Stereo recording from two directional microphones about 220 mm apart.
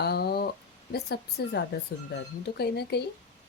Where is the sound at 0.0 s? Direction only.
45° left (ahead or behind).